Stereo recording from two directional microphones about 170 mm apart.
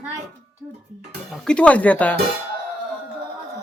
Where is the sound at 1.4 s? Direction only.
5° left (ahead or behind).